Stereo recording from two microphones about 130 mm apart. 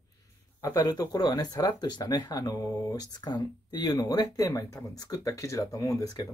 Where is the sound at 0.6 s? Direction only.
30° left (ahead or behind).